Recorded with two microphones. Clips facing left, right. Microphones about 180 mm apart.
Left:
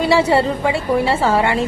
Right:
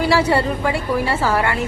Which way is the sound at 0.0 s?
25° left (ahead or behind).